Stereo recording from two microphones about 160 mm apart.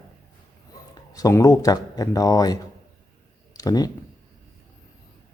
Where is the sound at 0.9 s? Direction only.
20° left (ahead or behind).